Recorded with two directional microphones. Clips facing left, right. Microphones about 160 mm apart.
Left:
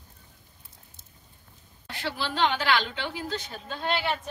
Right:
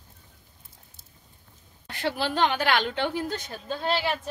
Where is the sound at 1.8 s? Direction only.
50° right (ahead or behind).